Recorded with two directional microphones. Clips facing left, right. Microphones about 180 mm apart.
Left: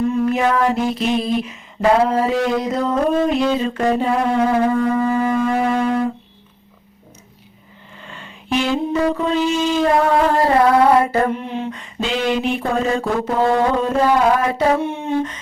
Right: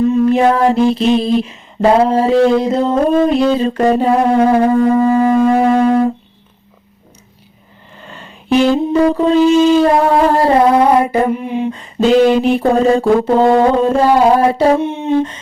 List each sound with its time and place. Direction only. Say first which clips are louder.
0.1 s mantra: right 6 dB; 30° right (ahead or behind)
8.0 s mantra: right 6 dB; 40° right (ahead or behind); by 11.7 s 10° right (ahead or behind)
11.7 s mantra: right 12 dB; 35° right (ahead or behind)